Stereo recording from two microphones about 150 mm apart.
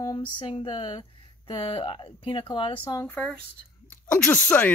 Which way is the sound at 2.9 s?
15° left (ahead or behind).